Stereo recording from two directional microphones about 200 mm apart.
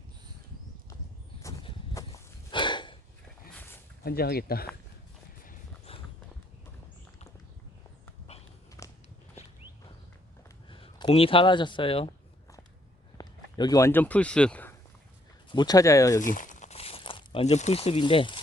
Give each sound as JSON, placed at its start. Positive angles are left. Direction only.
{"t": 1.4, "sound": "walk", "side_deg": 15}
{"t": 3.5, "sound": "a sound", "side_deg": 10}
{"t": 4.0, "sound": "speech", "side_deg": 50}
{"t": 5.5, "sound": "horse", "side_deg": 30}
{"t": 8.3, "sound": "a sound", "side_deg": 30}
{"t": 8.8, "sound": "biting", "side_deg": 15}
{"t": 10.7, "sound": "speech", "side_deg": 25}
{"t": 13.1, "sound": "speech", "side_deg": 20}
{"t": 15.5, "sound": "speech", "side_deg": 20}
{"t": 16.2, "sound": "crumpling", "side_deg": 40}